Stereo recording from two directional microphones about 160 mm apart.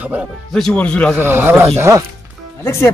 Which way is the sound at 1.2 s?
15° right (ahead or behind).